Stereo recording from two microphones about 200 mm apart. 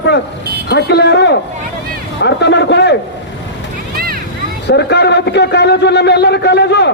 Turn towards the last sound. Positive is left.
turn(degrees=55)  # may be behind; listen again after turning